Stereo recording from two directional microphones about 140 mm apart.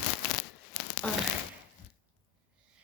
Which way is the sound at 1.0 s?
5° left (ahead or behind).